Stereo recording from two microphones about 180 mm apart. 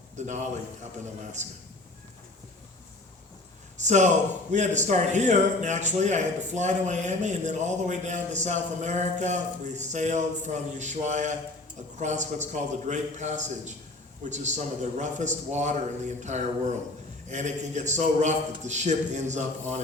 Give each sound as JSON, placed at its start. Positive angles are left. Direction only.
{"t": 0.2, "sound": "a man's voice", "side_deg": -40}
{"t": 3.8, "sound": "a man's voice", "side_deg": -40}